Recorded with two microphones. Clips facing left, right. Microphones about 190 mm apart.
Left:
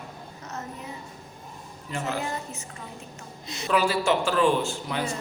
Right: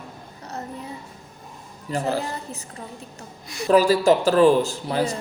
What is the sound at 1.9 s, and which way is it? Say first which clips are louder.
Speech: right 5 dB; 35° right (ahead or behind).